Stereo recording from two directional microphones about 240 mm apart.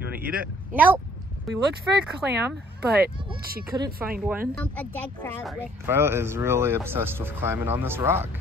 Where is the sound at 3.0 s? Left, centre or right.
Right.